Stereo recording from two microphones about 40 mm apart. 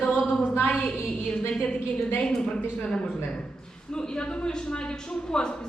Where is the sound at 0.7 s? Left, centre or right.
Left.